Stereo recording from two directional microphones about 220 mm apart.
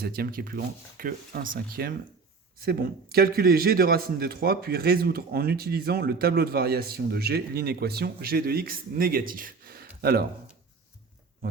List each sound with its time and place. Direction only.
0.0 s a man's voice: 45° right (ahead or behind)